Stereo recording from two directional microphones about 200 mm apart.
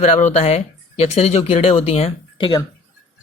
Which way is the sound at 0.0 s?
35° left (ahead or behind).